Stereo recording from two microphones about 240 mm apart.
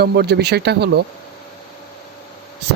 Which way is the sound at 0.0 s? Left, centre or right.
Right.